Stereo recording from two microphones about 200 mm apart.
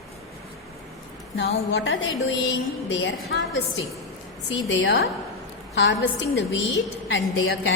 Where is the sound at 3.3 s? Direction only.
60° left (ahead or behind).